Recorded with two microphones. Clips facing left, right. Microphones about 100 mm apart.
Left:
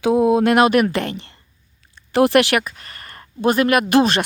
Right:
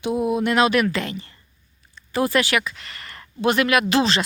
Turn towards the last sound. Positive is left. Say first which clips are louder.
# left 4 dB
turn(degrees=55)  # may be behind; listen again after turning